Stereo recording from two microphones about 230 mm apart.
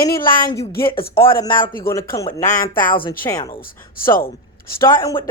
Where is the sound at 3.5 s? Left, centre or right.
Left.